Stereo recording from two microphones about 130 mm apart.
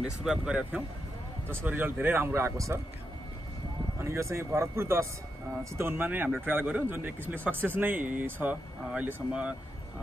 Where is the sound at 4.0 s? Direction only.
20° right (ahead or behind).